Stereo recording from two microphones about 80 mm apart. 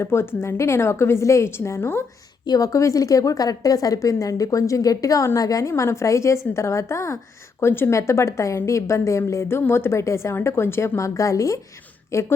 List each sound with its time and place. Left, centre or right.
0.0 s a woman's voice: left
2.5 s a woman's voice: left